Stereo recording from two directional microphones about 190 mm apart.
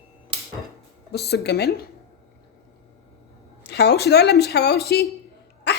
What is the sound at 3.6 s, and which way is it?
A woman's voice, 60° left (ahead or behind).